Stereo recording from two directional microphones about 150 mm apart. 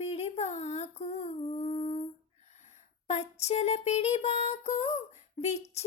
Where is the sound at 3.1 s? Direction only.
45° left (ahead or behind).